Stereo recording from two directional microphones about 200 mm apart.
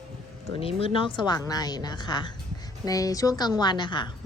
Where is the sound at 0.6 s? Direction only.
25° left (ahead or behind).